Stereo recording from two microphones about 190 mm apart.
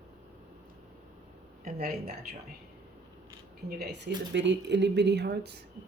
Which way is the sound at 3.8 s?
65° right (ahead or behind).